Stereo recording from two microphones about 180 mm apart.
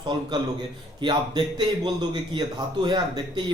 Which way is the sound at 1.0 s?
25° right (ahead or behind).